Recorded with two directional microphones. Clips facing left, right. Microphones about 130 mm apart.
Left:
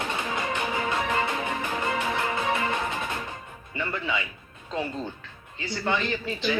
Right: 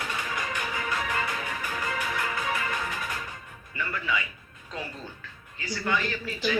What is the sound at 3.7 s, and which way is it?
Speech, 25° left (ahead or behind).